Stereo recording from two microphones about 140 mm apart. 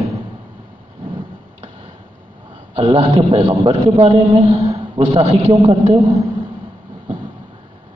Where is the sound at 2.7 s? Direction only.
45° right (ahead or behind).